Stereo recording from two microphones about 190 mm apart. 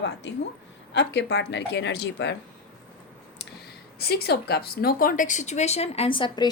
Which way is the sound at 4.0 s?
55° left (ahead or behind).